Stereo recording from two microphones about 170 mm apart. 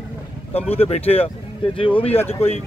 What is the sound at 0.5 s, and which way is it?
Speech, 35° left (ahead or behind).